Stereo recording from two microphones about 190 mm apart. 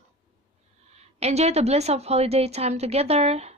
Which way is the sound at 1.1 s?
35° right (ahead or behind).